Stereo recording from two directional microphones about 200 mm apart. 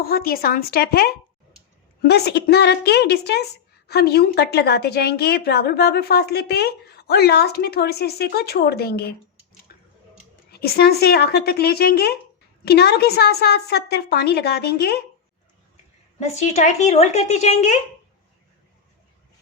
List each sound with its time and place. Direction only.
0.0 s a woman's voice: 50° left (ahead or behind)
9.7 s a sound: 50° left (ahead or behind)
10.5 s a woman's voice: 50° left (ahead or behind)
16.2 s a woman's voice: 35° left (ahead or behind)